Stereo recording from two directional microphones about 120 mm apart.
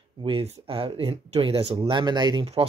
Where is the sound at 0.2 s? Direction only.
55° right (ahead or behind).